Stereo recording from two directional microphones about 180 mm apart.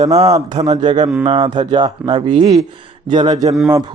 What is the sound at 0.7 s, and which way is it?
Speech, 25° right (ahead or behind).